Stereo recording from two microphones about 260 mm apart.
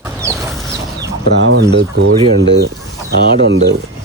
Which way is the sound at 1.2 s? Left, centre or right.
Right.